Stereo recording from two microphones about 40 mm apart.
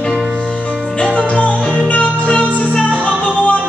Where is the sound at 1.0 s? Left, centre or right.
Left.